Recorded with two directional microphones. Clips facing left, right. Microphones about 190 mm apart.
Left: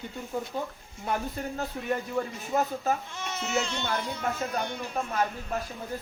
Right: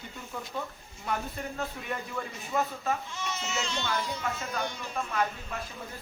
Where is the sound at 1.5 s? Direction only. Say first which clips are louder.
Left 6 dB; 35° left (ahead or behind).